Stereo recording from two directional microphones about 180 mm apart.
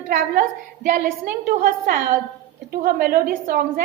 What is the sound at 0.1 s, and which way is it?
A woman's voice, 50° right (ahead or behind).